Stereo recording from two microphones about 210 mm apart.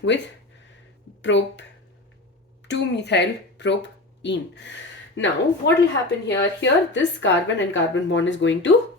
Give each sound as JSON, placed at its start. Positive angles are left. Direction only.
{"t": 1.2, "sound": "speech", "side_deg": 60}
{"t": 2.6, "sound": "speech", "side_deg": 55}